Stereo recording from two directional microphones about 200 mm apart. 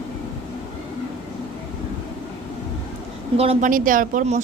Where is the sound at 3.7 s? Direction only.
45° right (ahead or behind).